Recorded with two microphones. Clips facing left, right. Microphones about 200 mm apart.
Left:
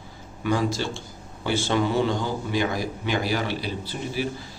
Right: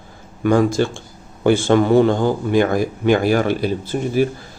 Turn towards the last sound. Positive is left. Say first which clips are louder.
# right 10 dB
turn(degrees=-50)  # may be behind; listen again after turning